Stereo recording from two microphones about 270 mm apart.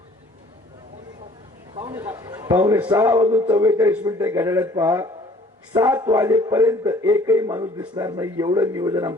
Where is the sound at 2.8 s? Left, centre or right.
Centre.